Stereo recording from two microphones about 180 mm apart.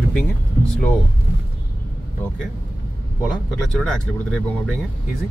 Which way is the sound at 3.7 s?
5° left (ahead or behind).